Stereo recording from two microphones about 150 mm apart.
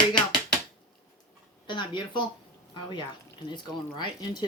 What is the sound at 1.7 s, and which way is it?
Speech, 30° left (ahead or behind).